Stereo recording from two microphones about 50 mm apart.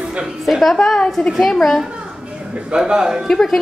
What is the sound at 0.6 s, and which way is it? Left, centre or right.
A woman's voice, centre.